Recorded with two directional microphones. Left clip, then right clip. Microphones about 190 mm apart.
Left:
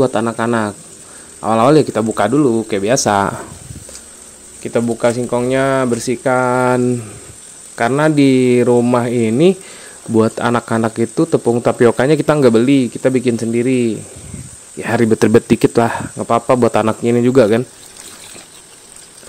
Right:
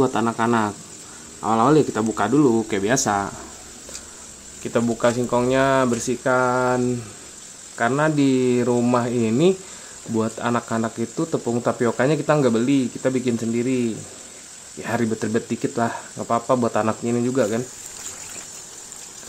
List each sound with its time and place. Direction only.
0.0 s speech: 25° left (ahead or behind)
3.1 s speech: 45° left (ahead or behind)
4.6 s speech: 20° left (ahead or behind); by 17.6 s 45° left (ahead or behind)